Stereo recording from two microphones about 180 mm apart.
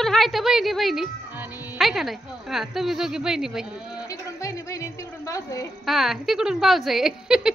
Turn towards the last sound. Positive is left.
turn(degrees=-5)  # may be behind; listen again after turning